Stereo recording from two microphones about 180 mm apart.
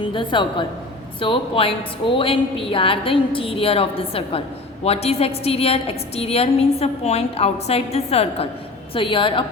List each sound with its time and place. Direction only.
0.0 s a woman's voice: 25° left (ahead or behind)